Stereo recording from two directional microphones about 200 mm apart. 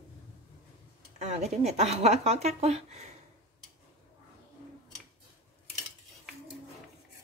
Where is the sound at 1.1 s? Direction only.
30° right (ahead or behind).